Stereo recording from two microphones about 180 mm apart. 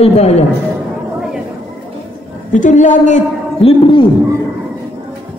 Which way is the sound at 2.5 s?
45° left (ahead or behind).